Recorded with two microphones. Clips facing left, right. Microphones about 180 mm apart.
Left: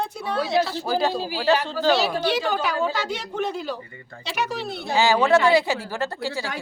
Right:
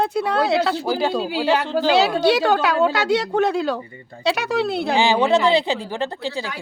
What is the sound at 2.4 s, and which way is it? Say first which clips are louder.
A woman's voice: right 6 dB; 75° right (ahead or behind).